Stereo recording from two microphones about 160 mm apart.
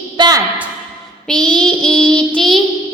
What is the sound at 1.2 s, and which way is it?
Child singing, 5° left (ahead or behind).